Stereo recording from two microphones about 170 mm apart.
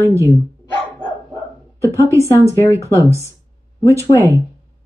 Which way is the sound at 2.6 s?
15° left (ahead or behind).